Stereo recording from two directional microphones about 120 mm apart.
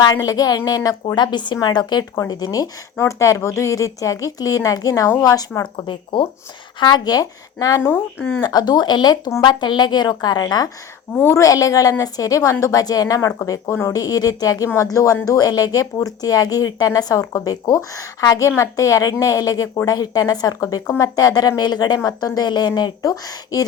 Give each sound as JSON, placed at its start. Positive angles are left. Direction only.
{"t": 0.0, "sound": "a woman's voice", "side_deg": 35}
{"t": 5.8, "sound": "a woman's voice", "side_deg": 45}
{"t": 8.4, "sound": "speech", "side_deg": 35}
{"t": 11.1, "sound": "a woman's voice", "side_deg": 20}